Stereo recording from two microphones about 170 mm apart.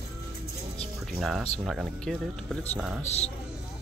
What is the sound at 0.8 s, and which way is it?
Music, centre (ahead or behind).